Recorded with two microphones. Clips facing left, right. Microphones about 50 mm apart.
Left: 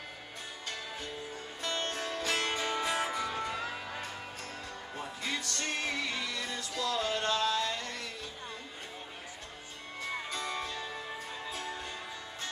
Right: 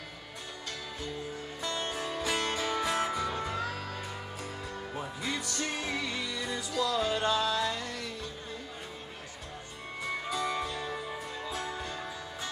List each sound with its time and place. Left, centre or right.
1.8 s music: centre
2.4 s music: centre
3.7 s music: centre
4.9 s music: centre
10.3 s music: centre